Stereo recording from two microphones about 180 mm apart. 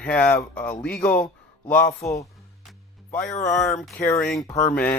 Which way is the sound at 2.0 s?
15° left (ahead or behind).